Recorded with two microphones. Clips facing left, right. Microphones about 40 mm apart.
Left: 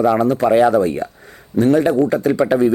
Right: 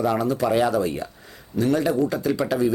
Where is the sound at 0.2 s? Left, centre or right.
Left.